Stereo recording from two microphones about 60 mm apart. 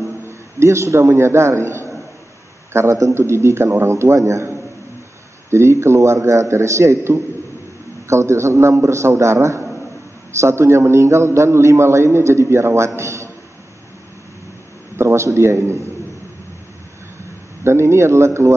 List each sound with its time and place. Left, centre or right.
0.3 s a man's voice: right
15.0 s a man's voice: right
17.6 s a man's voice: right